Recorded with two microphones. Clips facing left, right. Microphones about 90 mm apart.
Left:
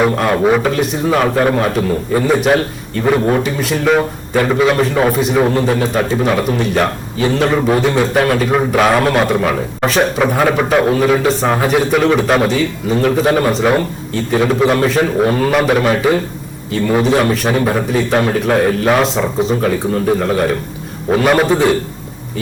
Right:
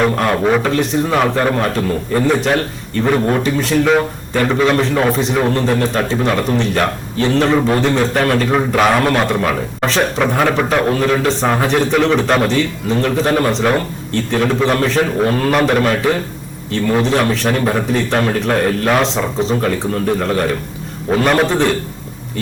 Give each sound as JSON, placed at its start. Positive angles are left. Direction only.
{"t": 0.0, "sound": "a man's voice", "side_deg": 5}